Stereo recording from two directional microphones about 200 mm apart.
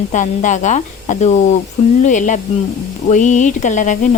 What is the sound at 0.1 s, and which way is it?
A woman's voice, 40° left (ahead or behind).